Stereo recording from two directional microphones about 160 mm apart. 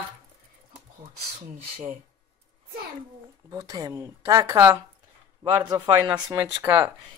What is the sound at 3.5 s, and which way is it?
Speech, 25° right (ahead or behind).